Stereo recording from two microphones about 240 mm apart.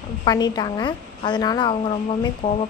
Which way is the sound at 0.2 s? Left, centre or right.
Centre.